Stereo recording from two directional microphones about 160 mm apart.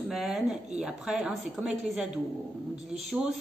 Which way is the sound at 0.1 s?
Centre (ahead or behind).